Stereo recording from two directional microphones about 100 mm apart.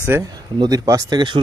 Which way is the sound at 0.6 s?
35° right (ahead or behind).